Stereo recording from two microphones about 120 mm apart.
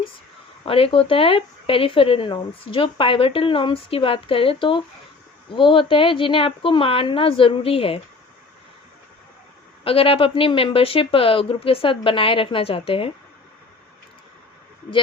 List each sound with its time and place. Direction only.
0.6 s speech: 50° left (ahead or behind)
9.8 s speech: 50° left (ahead or behind)